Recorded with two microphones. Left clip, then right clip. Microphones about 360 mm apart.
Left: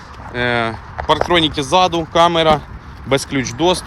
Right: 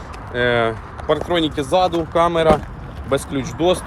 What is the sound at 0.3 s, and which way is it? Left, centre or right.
Speech, centre.